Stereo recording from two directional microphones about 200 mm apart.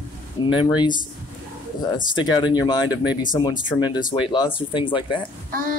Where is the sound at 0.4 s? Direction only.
25° left (ahead or behind).